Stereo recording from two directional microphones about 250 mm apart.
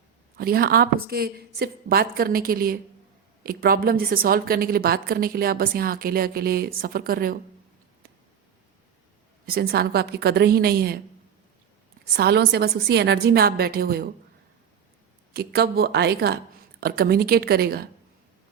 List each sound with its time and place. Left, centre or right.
0.3 s a woman's voice: right
9.5 s a woman's voice: right
12.1 s a woman's voice: right
15.3 s a woman's voice: right